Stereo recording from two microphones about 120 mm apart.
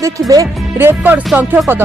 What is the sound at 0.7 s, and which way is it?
Speech, 15° right (ahead or behind).